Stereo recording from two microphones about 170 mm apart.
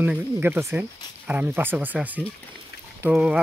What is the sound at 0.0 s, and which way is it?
Speech, 10° right (ahead or behind).